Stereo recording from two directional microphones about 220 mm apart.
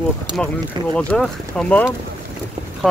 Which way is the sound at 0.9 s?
5° left (ahead or behind).